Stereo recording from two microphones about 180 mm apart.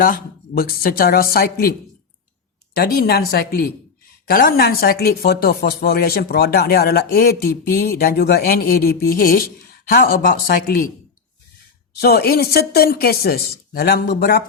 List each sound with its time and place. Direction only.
0.0 s speech: 55° left (ahead or behind)
2.7 s speech: 60° left (ahead or behind)
11.9 s speech: 60° left (ahead or behind)